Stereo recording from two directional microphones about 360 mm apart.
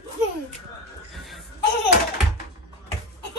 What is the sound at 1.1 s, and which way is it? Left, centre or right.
Laughter, centre.